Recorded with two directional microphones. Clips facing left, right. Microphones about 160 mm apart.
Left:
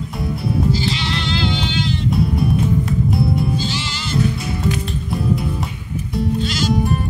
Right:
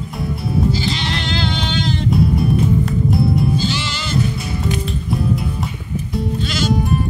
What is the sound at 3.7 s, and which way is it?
Music, 70° right (ahead or behind).